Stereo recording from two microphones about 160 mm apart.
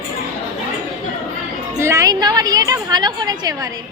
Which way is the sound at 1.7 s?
20° right (ahead or behind).